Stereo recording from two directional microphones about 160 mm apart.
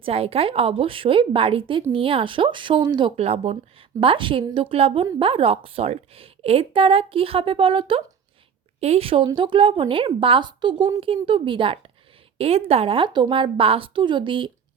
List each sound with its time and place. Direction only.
0.0 s a woman's voice: 35° right (ahead or behind)